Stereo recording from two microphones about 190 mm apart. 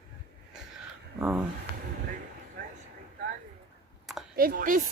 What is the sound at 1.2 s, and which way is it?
Speech, 10° right (ahead or behind).